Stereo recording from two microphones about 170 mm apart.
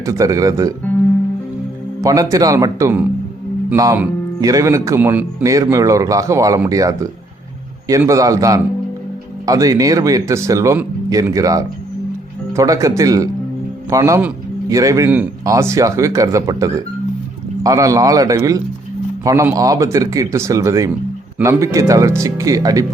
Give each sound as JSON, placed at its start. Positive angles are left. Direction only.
{"t": 0.0, "sound": "speech", "side_deg": -20}
{"t": 2.0, "sound": "speech", "side_deg": -20}